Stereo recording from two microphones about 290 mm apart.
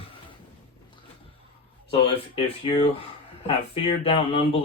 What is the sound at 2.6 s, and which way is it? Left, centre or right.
Speech, centre.